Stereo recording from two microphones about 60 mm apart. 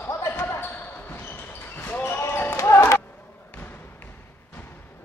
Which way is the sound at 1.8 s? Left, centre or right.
Left.